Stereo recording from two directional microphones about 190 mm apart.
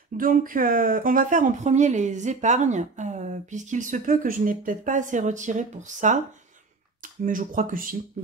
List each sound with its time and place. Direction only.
0.2 s speech: 45° right (ahead or behind)